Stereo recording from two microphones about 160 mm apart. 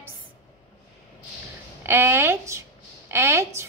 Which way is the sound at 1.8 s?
15° right (ahead or behind).